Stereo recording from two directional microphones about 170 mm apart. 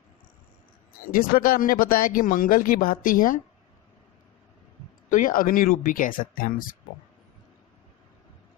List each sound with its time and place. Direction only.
1.1 s speech: 55° left (ahead or behind)
5.1 s speech: 55° left (ahead or behind)